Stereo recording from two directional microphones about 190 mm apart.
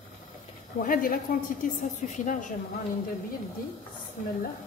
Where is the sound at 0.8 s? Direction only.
45° left (ahead or behind).